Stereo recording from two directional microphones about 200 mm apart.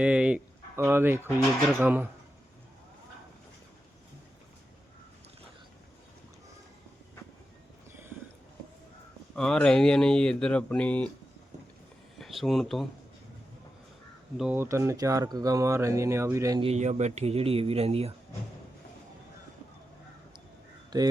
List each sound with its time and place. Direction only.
0.0 s speech: 5° right (ahead or behind)
9.3 s speech: 5° left (ahead or behind)
12.2 s speech: centre (ahead or behind)
14.3 s speech: 5° right (ahead or behind)
16.6 s speech: 35° right (ahead or behind)
20.9 s speech: 20° right (ahead or behind)